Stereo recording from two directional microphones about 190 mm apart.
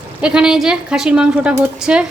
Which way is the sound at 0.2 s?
5° right (ahead or behind).